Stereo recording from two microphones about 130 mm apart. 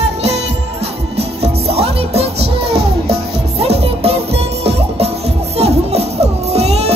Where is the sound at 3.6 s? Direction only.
50° right (ahead or behind).